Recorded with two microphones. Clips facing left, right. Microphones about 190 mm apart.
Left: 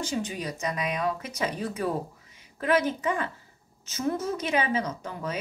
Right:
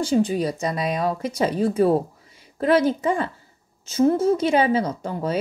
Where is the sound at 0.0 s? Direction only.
35° right (ahead or behind).